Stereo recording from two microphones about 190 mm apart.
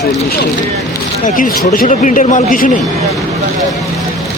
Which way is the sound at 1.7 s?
45° left (ahead or behind).